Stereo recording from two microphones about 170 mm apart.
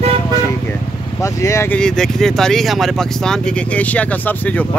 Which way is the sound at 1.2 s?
15° left (ahead or behind).